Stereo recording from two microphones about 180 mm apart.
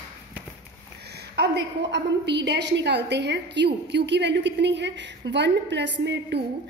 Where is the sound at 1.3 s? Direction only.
70° right (ahead or behind).